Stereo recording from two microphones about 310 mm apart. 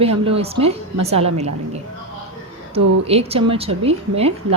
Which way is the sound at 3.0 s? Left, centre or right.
Centre.